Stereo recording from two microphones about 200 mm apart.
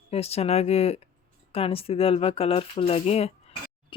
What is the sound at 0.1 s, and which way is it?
Speech, 30° left (ahead or behind).